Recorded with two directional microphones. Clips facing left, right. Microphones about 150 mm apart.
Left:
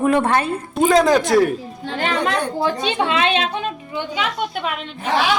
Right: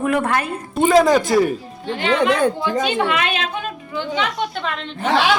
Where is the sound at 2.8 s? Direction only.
25° left (ahead or behind).